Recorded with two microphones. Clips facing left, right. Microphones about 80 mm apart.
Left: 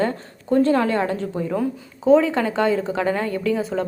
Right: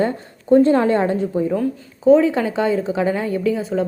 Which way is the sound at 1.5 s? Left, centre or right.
Centre.